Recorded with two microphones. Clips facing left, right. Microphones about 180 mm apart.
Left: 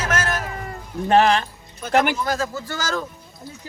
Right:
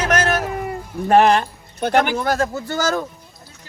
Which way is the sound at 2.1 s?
60° right (ahead or behind).